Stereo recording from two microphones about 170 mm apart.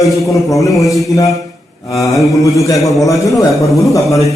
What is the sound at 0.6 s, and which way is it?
Speech, 20° left (ahead or behind).